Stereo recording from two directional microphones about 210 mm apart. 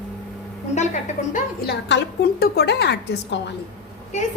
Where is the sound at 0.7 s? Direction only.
35° left (ahead or behind).